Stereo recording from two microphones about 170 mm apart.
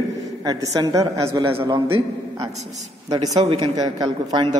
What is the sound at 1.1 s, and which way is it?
Speech, 30° right (ahead or behind).